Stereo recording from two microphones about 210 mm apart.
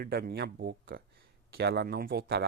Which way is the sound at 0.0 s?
50° right (ahead or behind).